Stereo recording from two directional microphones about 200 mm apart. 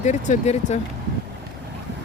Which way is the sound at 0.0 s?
35° left (ahead or behind).